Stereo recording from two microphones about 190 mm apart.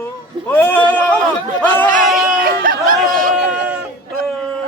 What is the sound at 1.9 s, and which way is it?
Chatter, 45° right (ahead or behind).